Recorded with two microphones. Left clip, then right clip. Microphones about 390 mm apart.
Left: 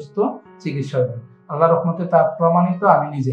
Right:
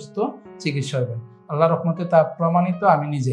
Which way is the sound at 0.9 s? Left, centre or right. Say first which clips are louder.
Left 6 dB; right.